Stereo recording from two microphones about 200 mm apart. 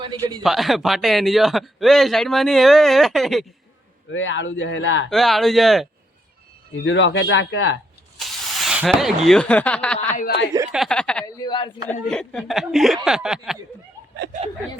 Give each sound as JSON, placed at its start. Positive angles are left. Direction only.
{"t": 0.0, "sound": "a man's voice", "side_deg": -20}
{"t": 0.4, "sound": "a man's voice", "side_deg": 0}
{"t": 4.1, "sound": "a man's voice", "side_deg": 65}
{"t": 5.1, "sound": "a man's voice", "side_deg": 0}
{"t": 6.8, "sound": "speech", "side_deg": 65}
{"t": 8.2, "sound": "speech", "side_deg": 0}
{"t": 10.2, "sound": "speech", "side_deg": 55}
{"t": 10.7, "sound": "a man's voice", "side_deg": 0}
{"t": 11.4, "sound": "speech", "side_deg": 25}
{"t": 11.9, "sound": "a man's voice", "side_deg": 5}